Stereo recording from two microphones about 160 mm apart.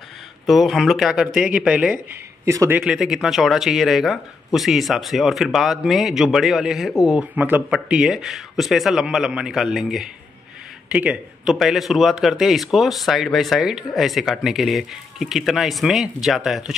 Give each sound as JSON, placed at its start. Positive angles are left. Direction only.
{"t": 0.5, "sound": "speech", "side_deg": 0}
{"t": 2.4, "sound": "speech", "side_deg": -20}
{"t": 2.8, "sound": "speech", "side_deg": -5}